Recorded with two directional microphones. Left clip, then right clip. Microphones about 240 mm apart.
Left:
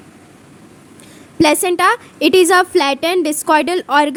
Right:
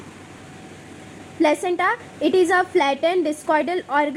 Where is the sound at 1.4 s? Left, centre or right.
Left.